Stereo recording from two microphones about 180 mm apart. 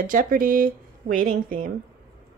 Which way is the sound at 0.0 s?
50° right (ahead or behind).